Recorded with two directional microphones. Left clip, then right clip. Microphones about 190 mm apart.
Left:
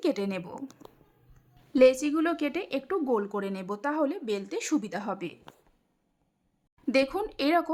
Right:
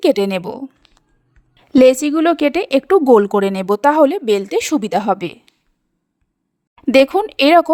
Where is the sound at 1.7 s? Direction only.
45° right (ahead or behind).